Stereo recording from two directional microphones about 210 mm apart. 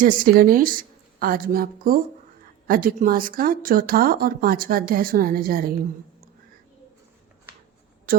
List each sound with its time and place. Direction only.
0.0 s a woman's voice: 40° right (ahead or behind)